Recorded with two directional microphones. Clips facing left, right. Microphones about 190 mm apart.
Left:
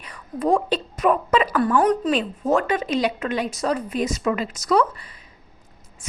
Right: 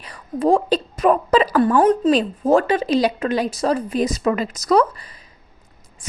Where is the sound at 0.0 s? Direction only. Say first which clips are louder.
Right 4 dB; 30° right (ahead or behind).